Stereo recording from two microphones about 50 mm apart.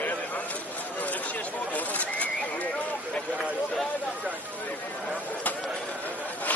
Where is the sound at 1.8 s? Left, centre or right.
Left.